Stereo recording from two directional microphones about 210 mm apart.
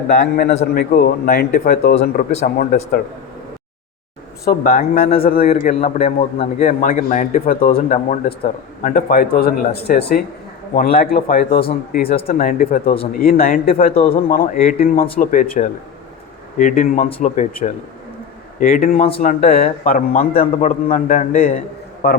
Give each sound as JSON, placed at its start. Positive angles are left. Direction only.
{"t": 0.6, "sound": "a man's voice", "side_deg": 45}
{"t": 4.4, "sound": "a man's voice", "side_deg": 45}
{"t": 6.6, "sound": "a man's voice", "side_deg": 45}
{"t": 12.0, "sound": "speech", "side_deg": 25}
{"t": 12.3, "sound": "a man's voice", "side_deg": 45}
{"t": 12.8, "sound": "speech", "side_deg": 25}
{"t": 13.2, "sound": "a man's voice", "side_deg": 45}
{"t": 13.9, "sound": "speech", "side_deg": 25}
{"t": 14.3, "sound": "a man's voice", "side_deg": 40}
{"t": 18.6, "sound": "a man's voice", "side_deg": 45}
{"t": 20.1, "sound": "a man's voice", "side_deg": 30}
{"t": 22.0, "sound": "a man's voice", "side_deg": 50}